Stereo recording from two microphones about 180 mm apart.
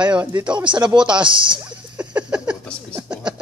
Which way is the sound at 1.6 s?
5° right (ahead or behind).